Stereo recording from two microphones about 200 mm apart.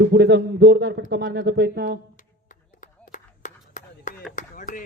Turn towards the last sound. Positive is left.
turn(degrees=40)  # may be behind; listen again after turning